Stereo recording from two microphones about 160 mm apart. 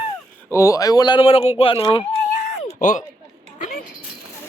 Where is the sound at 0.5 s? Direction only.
20° left (ahead or behind).